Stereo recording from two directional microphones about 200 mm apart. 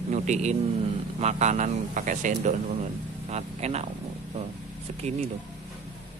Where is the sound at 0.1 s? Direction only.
35° right (ahead or behind).